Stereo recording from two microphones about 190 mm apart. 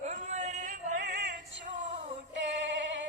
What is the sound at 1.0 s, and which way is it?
Music, 65° right (ahead or behind).